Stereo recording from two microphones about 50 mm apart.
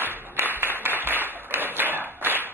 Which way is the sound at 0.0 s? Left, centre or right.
Right.